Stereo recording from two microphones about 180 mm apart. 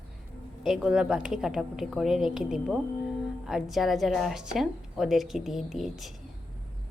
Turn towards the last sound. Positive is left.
turn(degrees=0)  # may be behind; listen again after turning